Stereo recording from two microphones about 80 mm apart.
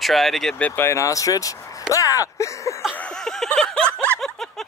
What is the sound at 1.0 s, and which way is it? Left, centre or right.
Speech, left.